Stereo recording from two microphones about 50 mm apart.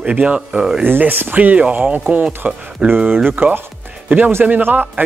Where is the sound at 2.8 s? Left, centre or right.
Right.